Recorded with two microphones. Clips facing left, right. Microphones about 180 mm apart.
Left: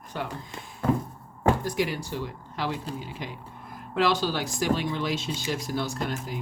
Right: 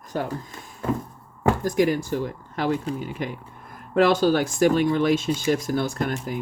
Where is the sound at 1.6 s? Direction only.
45° right (ahead or behind).